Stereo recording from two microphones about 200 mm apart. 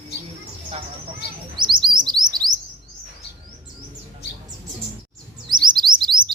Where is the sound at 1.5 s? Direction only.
25° right (ahead or behind).